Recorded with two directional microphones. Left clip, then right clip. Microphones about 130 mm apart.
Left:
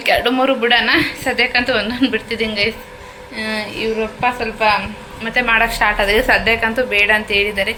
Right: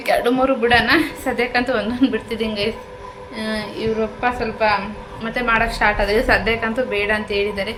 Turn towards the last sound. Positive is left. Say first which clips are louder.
# left 5 dB
turn(degrees=-5)  # may be behind; listen again after turning